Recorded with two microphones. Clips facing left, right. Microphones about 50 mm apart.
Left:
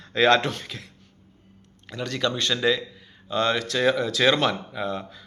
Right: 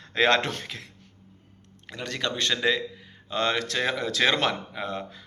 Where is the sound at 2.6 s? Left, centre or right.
Centre.